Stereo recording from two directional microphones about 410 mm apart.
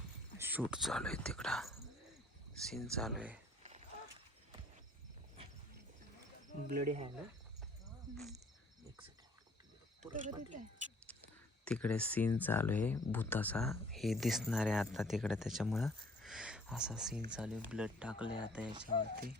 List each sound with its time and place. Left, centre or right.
0.3 s speech: centre
3.6 s a sound: centre
6.7 s cricket: centre
8.1 s speech: centre
10.1 s speech: centre
11.6 s speech: centre